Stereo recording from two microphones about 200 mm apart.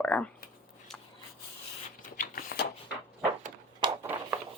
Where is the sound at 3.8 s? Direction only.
10° right (ahead or behind).